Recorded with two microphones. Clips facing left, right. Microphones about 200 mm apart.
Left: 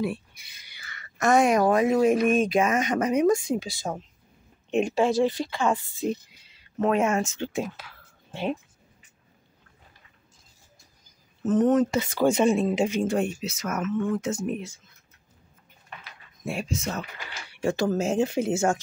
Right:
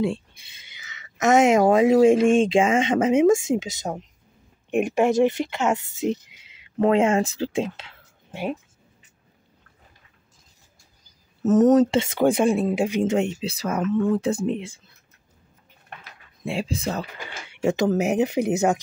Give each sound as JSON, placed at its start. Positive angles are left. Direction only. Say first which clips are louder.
{"t": 0.0, "sound": "a sound", "louder": "right 4 dB", "side_deg": -25}
{"t": 1.7, "sound": "speech", "louder": "right 5 dB", "side_deg": -25}
{"t": 6.8, "sound": "speech", "louder": "right 4 dB", "side_deg": -30}
{"t": 11.4, "sound": "speech", "louder": "right 5 dB", "side_deg": -45}
{"t": 12.0, "sound": "speech", "louder": "right 3 dB", "side_deg": -25}
{"t": 12.4, "sound": "speech", "louder": "right 1 dB", "side_deg": -5}
{"t": 13.0, "sound": "speech", "louder": "right 3 dB", "side_deg": -20}
{"t": 16.4, "sound": "speech", "louder": "right 3 dB", "side_deg": -30}
{"t": 17.5, "sound": "speech", "louder": "right 4 dB", "side_deg": -20}